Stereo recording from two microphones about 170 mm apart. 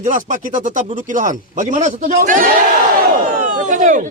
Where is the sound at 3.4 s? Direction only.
50° right (ahead or behind).